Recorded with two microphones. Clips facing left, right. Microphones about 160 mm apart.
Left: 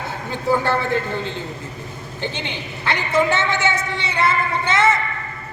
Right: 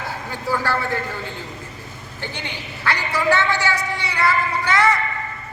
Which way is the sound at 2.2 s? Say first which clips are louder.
Left 4 dB; 20° left (ahead or behind).